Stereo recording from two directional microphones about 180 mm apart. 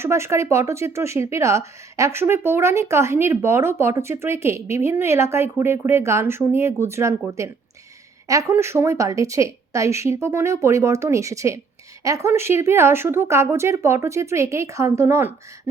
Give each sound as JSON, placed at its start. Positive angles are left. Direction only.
{"t": 0.0, "sound": "speech", "side_deg": -15}